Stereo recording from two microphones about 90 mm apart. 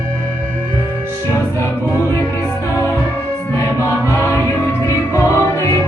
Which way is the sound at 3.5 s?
35° left (ahead or behind).